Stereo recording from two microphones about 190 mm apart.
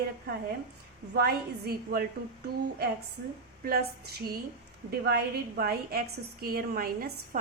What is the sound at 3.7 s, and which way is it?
A woman's voice, 55° right (ahead or behind).